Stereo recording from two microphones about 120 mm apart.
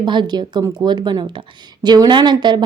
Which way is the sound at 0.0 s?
40° right (ahead or behind).